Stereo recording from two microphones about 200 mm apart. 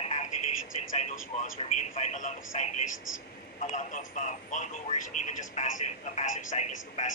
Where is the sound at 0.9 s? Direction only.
35° left (ahead or behind).